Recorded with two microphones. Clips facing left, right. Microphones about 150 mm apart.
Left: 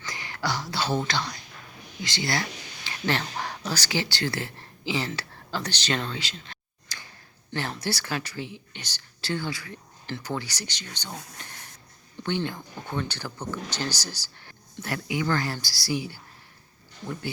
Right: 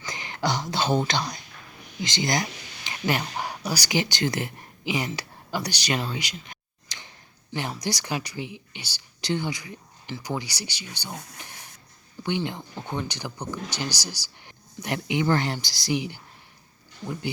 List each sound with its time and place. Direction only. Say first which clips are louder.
0.0 s whispering: right 3 dB; 20° right (ahead or behind)
2.0 s speech: right 3 dB; 20° right (ahead or behind)